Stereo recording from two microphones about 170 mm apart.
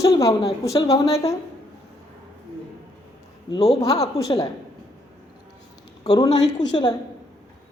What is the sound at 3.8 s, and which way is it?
Speech, 20° left (ahead or behind).